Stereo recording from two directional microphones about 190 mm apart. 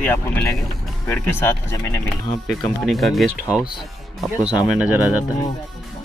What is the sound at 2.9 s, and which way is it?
Speech, centre (ahead or behind).